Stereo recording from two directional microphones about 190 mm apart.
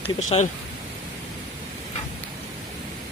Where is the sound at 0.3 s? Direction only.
30° left (ahead or behind).